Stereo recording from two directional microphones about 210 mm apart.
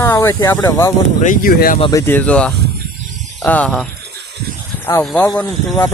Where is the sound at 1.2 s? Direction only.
40° left (ahead or behind).